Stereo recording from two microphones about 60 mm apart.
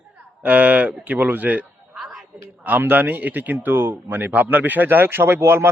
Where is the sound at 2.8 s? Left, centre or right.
Right.